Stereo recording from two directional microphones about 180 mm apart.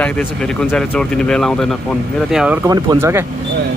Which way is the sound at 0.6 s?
5° left (ahead or behind).